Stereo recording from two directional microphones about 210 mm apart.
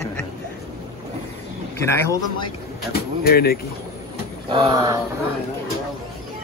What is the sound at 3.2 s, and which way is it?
Speech, 45° left (ahead or behind).